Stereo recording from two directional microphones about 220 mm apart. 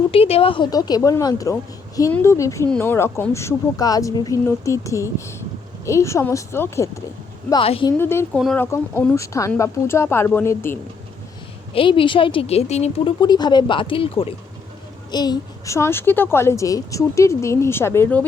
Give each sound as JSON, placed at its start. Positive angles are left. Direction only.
{"t": 0.1, "sound": "a child's voice", "side_deg": 25}
{"t": 7.5, "sound": "a woman's voice", "side_deg": 25}
{"t": 7.9, "sound": "a child's voice", "side_deg": 10}
{"t": 11.7, "sound": "a woman's voice", "side_deg": 25}